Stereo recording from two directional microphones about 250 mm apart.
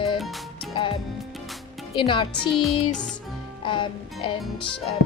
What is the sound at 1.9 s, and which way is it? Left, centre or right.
Speech, centre.